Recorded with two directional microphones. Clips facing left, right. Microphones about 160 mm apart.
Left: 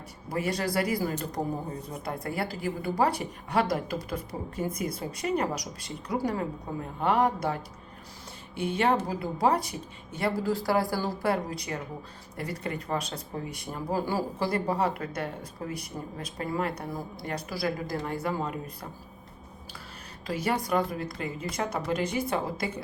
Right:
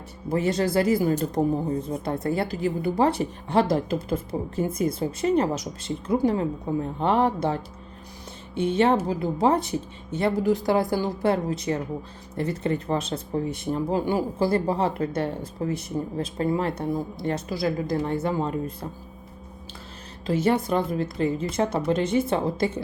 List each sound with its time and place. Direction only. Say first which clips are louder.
0.3 s a woman's voice: right 6 dB; 25° right (ahead or behind)
20.2 s a woman's voice: right 7 dB; 25° right (ahead or behind)